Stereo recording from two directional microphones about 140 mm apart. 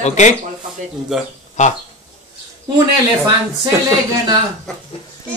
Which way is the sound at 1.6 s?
60° left (ahead or behind).